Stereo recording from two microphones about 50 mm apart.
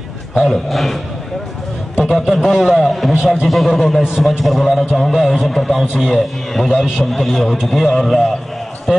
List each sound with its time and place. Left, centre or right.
0.4 s a man's voice: centre
2.1 s a man's voice: centre